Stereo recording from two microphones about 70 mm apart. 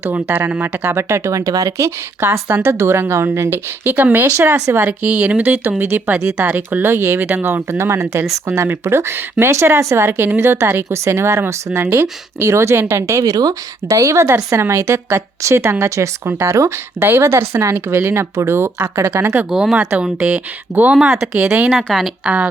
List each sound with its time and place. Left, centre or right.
0.0 s speech: right
2.2 s speech: right
3.8 s speech: right
5.0 s speech: centre; by 19.3 s right
19.5 s speech: centre
20.9 s speech: centre
21.8 s speech: centre
22.2 s speech: centre